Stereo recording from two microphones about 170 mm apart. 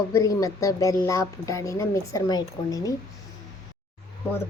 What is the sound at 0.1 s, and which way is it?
A woman's voice, 20° left (ahead or behind).